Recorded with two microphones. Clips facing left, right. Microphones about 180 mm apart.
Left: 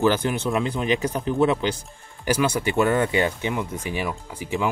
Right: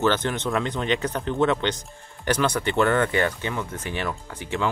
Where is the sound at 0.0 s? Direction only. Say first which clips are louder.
Left 2 dB; 10° left (ahead or behind).